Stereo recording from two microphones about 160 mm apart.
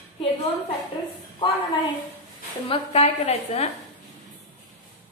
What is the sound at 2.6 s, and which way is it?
A woman's voice, 40° left (ahead or behind).